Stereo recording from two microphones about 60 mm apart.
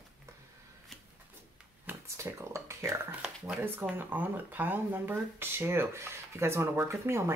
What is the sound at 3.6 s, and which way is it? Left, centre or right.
Speech, right.